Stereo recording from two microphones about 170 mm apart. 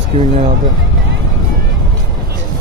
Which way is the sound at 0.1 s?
40° right (ahead or behind).